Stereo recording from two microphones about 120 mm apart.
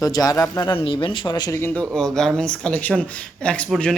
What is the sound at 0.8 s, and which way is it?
Speech, 45° left (ahead or behind).